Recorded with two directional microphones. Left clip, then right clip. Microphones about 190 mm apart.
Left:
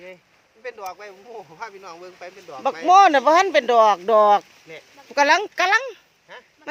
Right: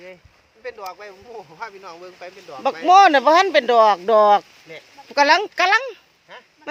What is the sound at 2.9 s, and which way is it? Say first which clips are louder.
Speech: right 2 dB; 10° right (ahead or behind).